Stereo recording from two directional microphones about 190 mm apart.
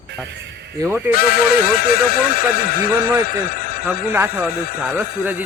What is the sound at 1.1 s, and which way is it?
Speech, 50° left (ahead or behind).